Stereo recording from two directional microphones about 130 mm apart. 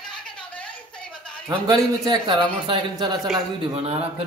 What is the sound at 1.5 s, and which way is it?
A man's voice, 35° right (ahead or behind).